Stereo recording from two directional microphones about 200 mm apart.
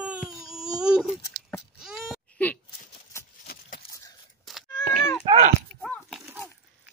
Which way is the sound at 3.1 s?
15° left (ahead or behind).